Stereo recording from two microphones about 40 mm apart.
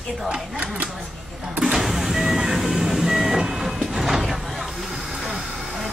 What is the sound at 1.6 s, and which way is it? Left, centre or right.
Vehicle, centre.